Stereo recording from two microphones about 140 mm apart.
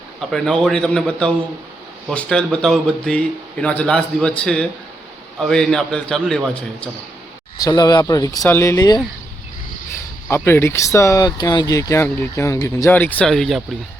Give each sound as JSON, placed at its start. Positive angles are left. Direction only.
{"t": 0.2, "sound": "a man's voice", "side_deg": 0}
{"t": 7.6, "sound": "speech", "side_deg": 30}
{"t": 10.2, "sound": "speech", "side_deg": 15}
{"t": 13.0, "sound": "a man's voice", "side_deg": 10}